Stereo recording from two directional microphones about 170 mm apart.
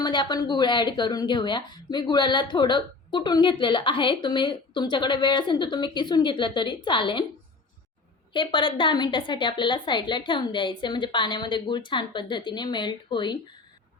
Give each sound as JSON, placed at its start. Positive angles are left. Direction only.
{"t": 0.0, "sound": "speech", "side_deg": 25}
{"t": 8.3, "sound": "speech", "side_deg": 30}